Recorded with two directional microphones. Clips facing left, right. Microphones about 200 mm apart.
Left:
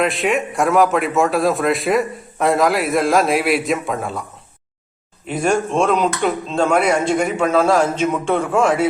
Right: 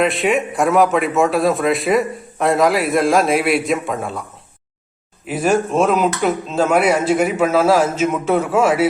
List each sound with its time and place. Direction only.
0.0 s a man's voice: centre (ahead or behind)
5.2 s a man's voice: 5° right (ahead or behind)